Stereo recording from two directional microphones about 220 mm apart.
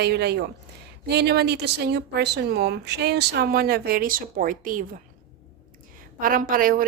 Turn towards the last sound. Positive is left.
turn(degrees=-40)  # may be behind; listen again after turning